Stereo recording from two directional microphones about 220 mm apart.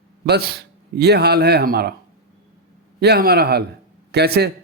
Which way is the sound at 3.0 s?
45° right (ahead or behind).